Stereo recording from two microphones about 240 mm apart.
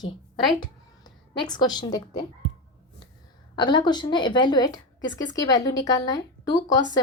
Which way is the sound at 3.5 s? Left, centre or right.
Centre.